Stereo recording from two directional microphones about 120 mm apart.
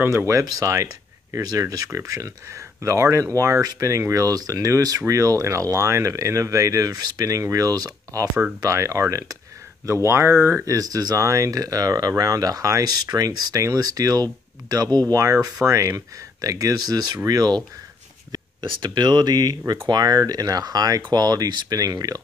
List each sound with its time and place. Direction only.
0.0 s speech: 25° right (ahead or behind)